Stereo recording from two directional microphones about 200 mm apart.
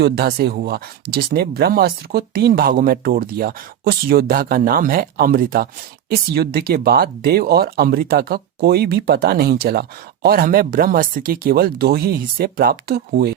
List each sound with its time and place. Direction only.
0.0 s speech: 50° right (ahead or behind)